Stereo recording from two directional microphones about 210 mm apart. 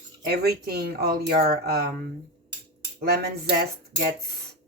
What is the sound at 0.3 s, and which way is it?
Speech, 50° right (ahead or behind).